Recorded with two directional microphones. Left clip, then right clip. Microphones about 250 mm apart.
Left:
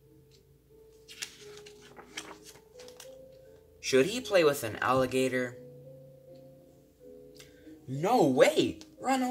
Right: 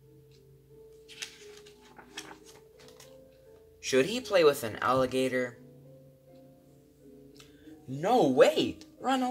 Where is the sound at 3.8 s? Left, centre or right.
Centre.